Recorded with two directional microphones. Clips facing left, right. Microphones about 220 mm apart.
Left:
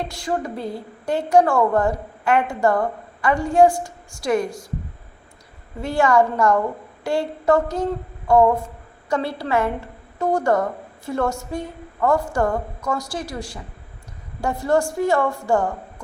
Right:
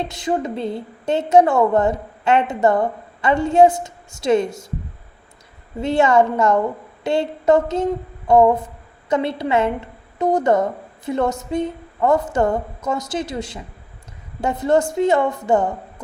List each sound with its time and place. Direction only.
0.0 s a woman's voice: 20° right (ahead or behind)
5.8 s a woman's voice: 20° right (ahead or behind)
7.0 s a sound: 20° right (ahead or behind)
9.0 s a woman's voice: 20° right (ahead or behind)